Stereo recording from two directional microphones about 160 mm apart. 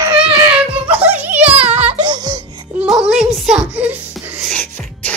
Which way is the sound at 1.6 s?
40° right (ahead or behind).